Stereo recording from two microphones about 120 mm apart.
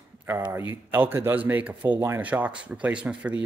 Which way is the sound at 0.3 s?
15° right (ahead or behind).